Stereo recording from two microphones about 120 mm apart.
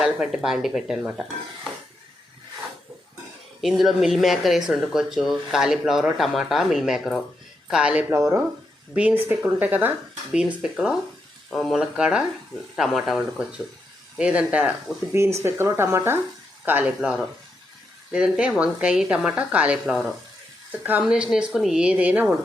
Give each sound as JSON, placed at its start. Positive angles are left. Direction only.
{"t": 0.0, "sound": "speech", "side_deg": -5}
{"t": 3.6, "sound": "a woman's voice", "side_deg": 0}
{"t": 8.1, "sound": "a woman's voice", "side_deg": -20}
{"t": 15.1, "sound": "speech", "side_deg": -25}
{"t": 16.6, "sound": "a woman's voice", "side_deg": -10}
{"t": 20.7, "sound": "a woman's voice", "side_deg": -15}